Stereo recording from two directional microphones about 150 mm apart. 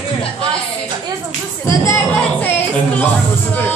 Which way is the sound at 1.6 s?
20° left (ahead or behind).